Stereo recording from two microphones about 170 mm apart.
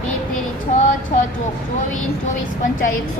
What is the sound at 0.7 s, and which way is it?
Child singing, 50° left (ahead or behind).